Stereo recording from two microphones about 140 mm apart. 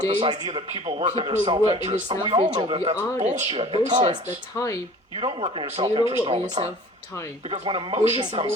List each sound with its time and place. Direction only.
0.2 s a man's voice: 40° right (ahead or behind)
4.5 s speech: 20° left (ahead or behind)
5.1 s a man's voice: 40° right (ahead or behind)